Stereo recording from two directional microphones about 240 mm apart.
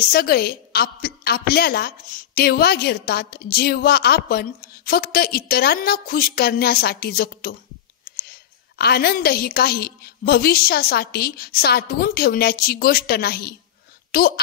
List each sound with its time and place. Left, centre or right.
0.1 s a woman's voice: left